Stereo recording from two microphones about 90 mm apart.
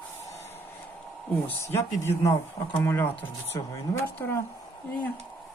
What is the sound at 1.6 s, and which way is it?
Speech, 35° left (ahead or behind).